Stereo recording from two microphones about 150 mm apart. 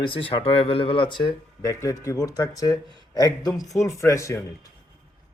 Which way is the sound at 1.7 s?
20° left (ahead or behind).